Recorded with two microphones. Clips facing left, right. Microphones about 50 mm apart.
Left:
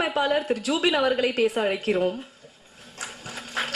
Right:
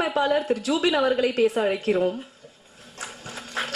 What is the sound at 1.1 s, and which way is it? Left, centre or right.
Speech, left.